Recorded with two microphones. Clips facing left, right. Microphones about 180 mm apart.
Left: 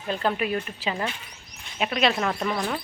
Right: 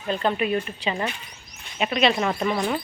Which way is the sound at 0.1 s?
Centre (ahead or behind).